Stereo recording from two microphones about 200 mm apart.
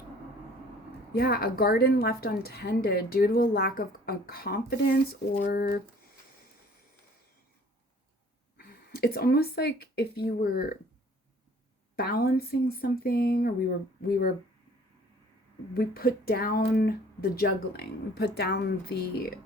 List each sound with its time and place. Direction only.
1.1 s a woman's voice: 50° left (ahead or behind)
8.5 s speech: 50° left (ahead or behind)
11.9 s a woman's voice: 50° left (ahead or behind)
15.7 s a woman's voice: 50° left (ahead or behind)